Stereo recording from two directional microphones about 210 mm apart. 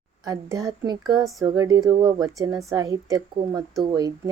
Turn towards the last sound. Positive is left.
turn(degrees=-20)  # may be behind; listen again after turning